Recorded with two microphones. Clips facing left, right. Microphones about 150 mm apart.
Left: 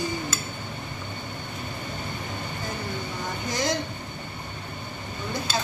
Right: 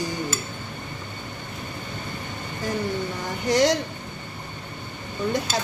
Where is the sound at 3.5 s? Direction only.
85° right.